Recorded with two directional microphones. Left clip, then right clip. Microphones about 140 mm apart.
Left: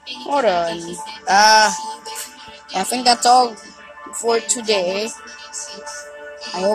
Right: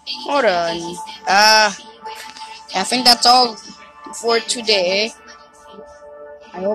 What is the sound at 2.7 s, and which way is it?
Speech, 5° left (ahead or behind).